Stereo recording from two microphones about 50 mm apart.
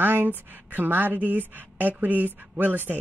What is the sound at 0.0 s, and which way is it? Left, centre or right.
Speech, right.